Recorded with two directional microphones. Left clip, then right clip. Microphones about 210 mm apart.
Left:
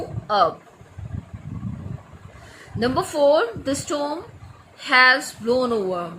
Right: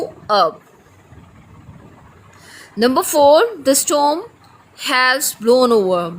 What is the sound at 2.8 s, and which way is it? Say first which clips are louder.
A woman's voice: right 7 dB; 55° right (ahead or behind).